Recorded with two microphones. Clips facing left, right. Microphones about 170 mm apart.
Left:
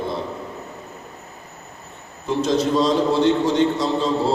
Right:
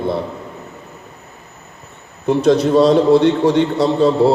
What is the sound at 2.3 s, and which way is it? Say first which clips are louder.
A man's voice: right 7 dB; 60° right (ahead or behind).